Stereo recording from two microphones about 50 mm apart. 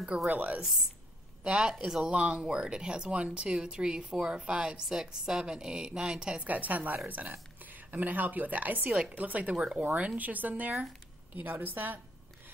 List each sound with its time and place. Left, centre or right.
0.3 s speech: right
1.4 s speech: centre
6.5 s a woman's voice: right